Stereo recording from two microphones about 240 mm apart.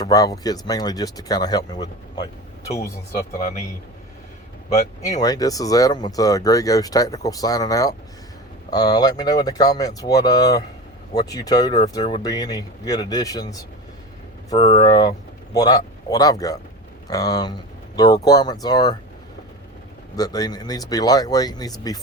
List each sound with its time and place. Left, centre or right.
0.0 s speech: centre
3.3 s speech: left
4.7 s speech: left
5.2 s speech: centre
14.8 s speech: centre
20.1 s speech: centre